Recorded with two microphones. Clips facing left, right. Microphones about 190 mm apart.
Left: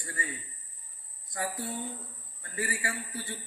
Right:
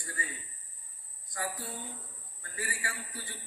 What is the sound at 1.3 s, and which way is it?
A man's voice, 25° left (ahead or behind).